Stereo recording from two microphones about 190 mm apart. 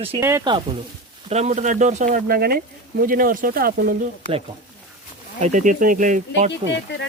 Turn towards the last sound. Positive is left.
turn(degrees=65)  # may be behind; listen again after turning